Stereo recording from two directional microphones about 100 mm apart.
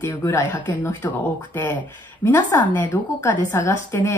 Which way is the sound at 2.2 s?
20° left (ahead or behind).